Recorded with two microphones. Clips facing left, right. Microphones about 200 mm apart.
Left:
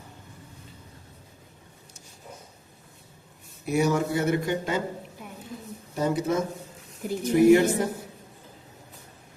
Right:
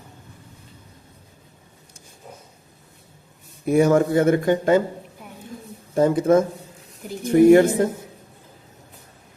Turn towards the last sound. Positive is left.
turn(degrees=-50)  # may be behind; listen again after turning